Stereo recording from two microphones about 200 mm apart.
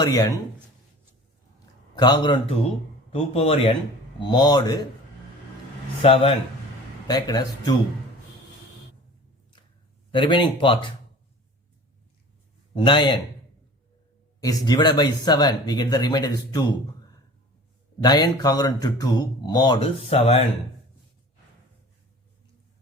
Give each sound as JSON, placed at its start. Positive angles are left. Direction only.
{"t": 0.0, "sound": "speech", "side_deg": 20}
{"t": 2.0, "sound": "speech", "side_deg": 20}
{"t": 6.0, "sound": "speech", "side_deg": 30}
{"t": 10.1, "sound": "speech", "side_deg": 25}
{"t": 12.7, "sound": "speech", "side_deg": 25}
{"t": 14.4, "sound": "speech", "side_deg": 20}
{"t": 18.0, "sound": "speech", "side_deg": 20}